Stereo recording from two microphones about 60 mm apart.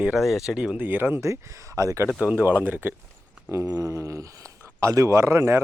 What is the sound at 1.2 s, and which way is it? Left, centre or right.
Speech, right.